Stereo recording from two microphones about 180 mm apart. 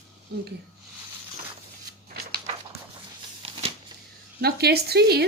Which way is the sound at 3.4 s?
30° right (ahead or behind).